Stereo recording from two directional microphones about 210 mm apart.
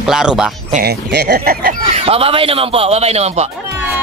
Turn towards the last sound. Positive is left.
turn(degrees=-30)  # may be behind; listen again after turning